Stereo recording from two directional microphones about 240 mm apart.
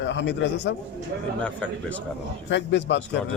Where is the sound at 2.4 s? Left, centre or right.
Left.